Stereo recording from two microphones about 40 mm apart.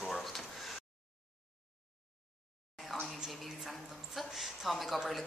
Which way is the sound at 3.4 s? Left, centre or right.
Centre.